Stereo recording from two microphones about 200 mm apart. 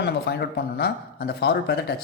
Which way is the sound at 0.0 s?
55° left (ahead or behind).